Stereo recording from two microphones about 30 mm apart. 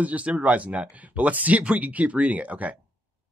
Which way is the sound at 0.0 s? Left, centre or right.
Right.